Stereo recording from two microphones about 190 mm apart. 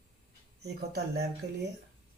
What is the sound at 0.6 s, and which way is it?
Speech, 60° right (ahead or behind).